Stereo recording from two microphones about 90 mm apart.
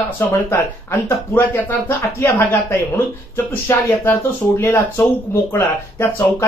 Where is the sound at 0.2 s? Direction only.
25° left (ahead or behind).